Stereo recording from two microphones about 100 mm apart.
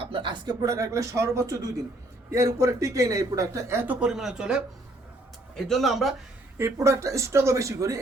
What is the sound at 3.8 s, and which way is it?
Speech, 15° right (ahead or behind).